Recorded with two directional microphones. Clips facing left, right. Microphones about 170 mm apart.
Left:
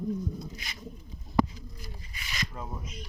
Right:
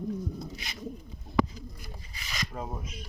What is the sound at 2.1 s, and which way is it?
Rub, 35° right (ahead or behind).